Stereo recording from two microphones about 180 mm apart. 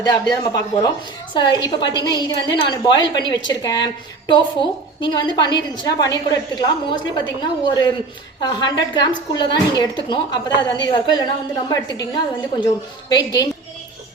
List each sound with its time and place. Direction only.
0.0 s a woman's voice: 20° left (ahead or behind)
4.9 s a woman's voice: 25° left (ahead or behind)